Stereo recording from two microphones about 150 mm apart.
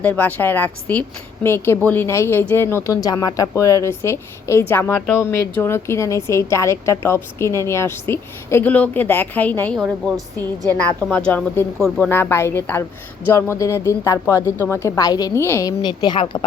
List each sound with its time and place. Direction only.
0.0 s a woman's voice: 10° left (ahead or behind)
15.8 s a woman's voice: 30° left (ahead or behind)